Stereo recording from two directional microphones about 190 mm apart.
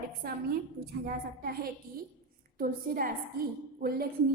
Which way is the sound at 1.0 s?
50° right (ahead or behind).